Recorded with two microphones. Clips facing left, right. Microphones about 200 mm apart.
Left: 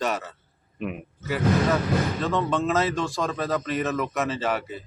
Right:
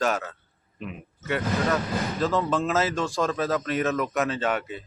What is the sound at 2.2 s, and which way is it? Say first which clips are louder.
Speech: even; centre (ahead or behind).